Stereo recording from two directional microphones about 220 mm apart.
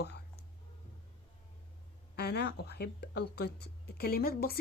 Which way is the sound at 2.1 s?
45° left (ahead or behind).